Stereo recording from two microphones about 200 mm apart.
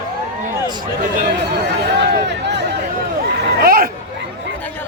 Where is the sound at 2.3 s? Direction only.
60° right (ahead or behind).